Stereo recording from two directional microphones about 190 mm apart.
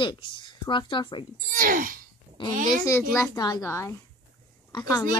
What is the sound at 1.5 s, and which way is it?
Speech, 45° right (ahead or behind).